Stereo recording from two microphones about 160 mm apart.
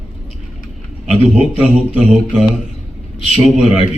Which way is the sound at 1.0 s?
5° right (ahead or behind).